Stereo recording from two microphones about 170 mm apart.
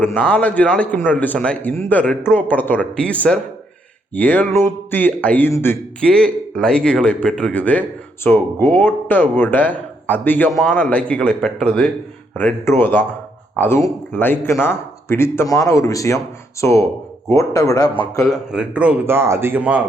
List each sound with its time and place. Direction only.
0.0 s a man's voice: 10° left (ahead or behind)
18.3 s speech: 5° right (ahead or behind)